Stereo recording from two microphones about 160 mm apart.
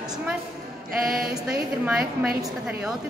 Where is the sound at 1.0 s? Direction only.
Centre (ahead or behind).